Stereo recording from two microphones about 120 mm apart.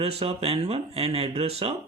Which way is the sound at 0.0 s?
55° right (ahead or behind).